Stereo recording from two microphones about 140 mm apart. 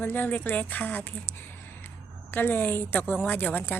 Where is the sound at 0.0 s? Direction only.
15° left (ahead or behind).